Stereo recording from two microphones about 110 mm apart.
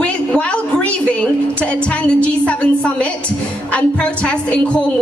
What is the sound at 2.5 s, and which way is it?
Speech, 10° left (ahead or behind).